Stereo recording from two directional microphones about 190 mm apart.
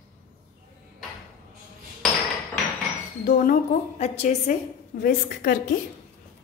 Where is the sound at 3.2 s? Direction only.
45° left (ahead or behind).